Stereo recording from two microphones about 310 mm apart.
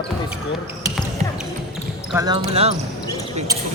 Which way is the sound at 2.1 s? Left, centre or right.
Centre.